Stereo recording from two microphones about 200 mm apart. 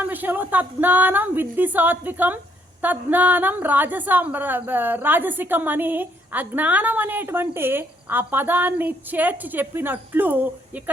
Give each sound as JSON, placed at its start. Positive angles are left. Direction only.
{"t": 0.0, "sound": "a woman's voice", "side_deg": -10}